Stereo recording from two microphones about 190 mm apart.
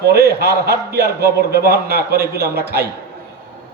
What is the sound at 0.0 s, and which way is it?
A man's voice, 55° right (ahead or behind).